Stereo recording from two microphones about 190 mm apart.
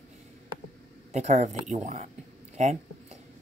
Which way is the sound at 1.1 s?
35° right (ahead or behind).